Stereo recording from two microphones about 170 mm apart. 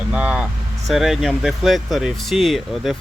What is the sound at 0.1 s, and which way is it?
Vehicle, 5° right (ahead or behind).